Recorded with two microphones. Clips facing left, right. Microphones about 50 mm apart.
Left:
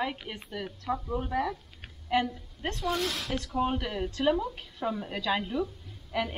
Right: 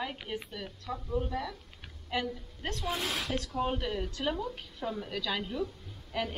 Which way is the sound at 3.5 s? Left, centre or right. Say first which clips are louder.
Left 4 dB; centre.